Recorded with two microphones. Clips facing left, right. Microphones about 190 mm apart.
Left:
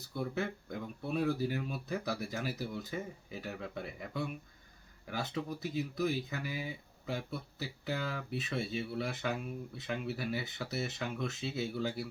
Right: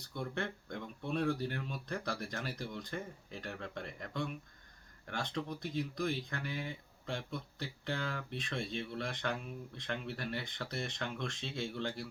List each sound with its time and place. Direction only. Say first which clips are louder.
0.0 s speech: left 3 dB; 5° left (ahead or behind)